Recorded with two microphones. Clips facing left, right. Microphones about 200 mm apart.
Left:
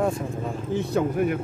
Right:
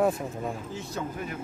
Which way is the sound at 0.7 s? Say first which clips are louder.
Left 11 dB; 60° left (ahead or behind).